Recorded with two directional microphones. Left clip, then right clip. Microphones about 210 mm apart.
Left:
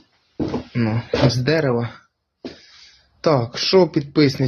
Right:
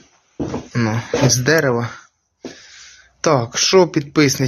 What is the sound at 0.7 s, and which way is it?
Speech, centre (ahead or behind).